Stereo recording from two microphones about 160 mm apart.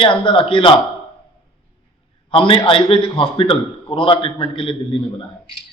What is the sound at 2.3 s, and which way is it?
A man's voice, 35° left (ahead or behind).